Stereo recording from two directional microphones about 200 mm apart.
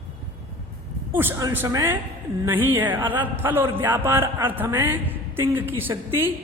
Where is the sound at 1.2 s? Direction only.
15° right (ahead or behind).